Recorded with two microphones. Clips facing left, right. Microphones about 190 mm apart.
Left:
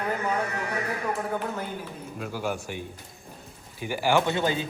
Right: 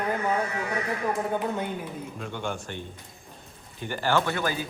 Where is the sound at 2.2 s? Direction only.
5° left (ahead or behind).